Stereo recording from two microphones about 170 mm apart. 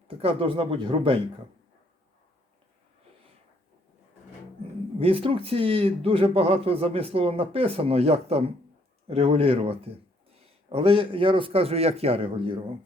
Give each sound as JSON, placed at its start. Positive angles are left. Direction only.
{"t": 0.1, "sound": "speech", "side_deg": -35}
{"t": 4.9, "sound": "speech", "side_deg": -35}